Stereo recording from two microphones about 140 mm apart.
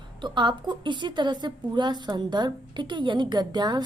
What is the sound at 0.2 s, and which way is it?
A woman's voice, 35° right (ahead or behind).